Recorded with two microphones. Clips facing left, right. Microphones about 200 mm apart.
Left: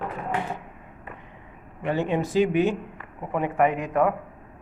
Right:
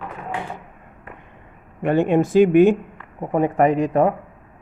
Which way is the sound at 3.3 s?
40° right (ahead or behind).